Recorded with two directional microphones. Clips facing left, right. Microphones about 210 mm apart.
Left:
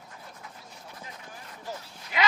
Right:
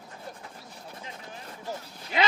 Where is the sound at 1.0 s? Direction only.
25° right (ahead or behind).